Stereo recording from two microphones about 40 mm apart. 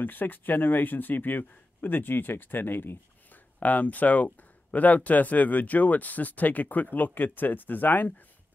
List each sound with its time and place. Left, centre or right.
0.0 s speech: left
3.5 s speech: left